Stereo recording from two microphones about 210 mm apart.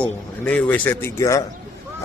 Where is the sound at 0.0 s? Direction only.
5° left (ahead or behind).